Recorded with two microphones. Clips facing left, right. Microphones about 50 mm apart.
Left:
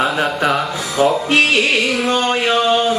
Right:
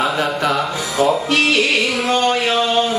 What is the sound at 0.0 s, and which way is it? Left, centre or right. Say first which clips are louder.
Music: left 1 dB; centre.